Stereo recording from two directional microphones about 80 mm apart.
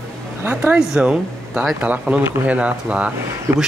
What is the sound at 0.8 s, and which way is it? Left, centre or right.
Speech, centre.